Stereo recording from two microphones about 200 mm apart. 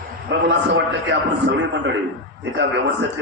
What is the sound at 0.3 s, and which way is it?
A man's voice, 60° right (ahead or behind).